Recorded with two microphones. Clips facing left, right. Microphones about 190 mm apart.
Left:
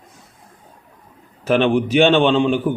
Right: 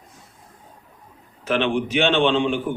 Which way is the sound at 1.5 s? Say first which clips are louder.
Left 6 dB; 45° left (ahead or behind).